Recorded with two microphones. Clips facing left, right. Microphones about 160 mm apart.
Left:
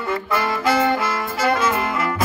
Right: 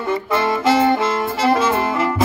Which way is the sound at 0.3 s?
25° right (ahead or behind).